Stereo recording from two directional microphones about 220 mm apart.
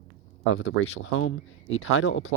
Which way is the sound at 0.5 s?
65° left (ahead or behind).